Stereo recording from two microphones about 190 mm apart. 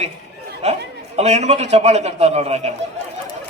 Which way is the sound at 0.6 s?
35° right (ahead or behind).